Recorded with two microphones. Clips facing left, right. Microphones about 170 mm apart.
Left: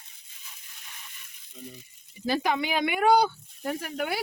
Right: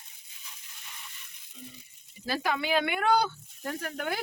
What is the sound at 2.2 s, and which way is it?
Speech, 20° left (ahead or behind).